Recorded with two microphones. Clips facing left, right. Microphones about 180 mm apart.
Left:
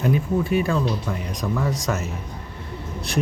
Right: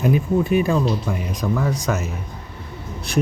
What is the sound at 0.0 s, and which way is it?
Speech, 20° right (ahead or behind).